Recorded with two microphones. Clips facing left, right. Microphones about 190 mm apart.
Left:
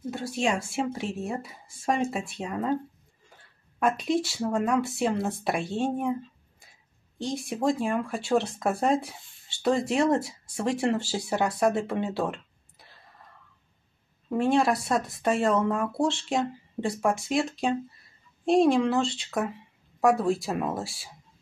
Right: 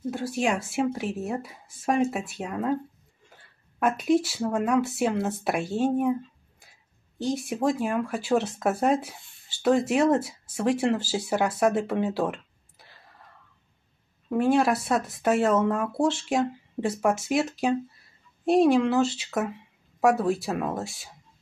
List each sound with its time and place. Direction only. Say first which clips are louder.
0.1 s speech: right 1 dB; 5° right (ahead or behind)
3.8 s speech: right 3 dB; 5° right (ahead or behind)
7.2 s speech: right 3 dB; 5° right (ahead or behind)
14.3 s speech: right 1 dB; centre (ahead or behind)